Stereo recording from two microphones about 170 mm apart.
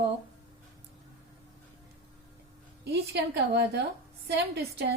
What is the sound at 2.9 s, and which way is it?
A woman's voice, 75° right (ahead or behind).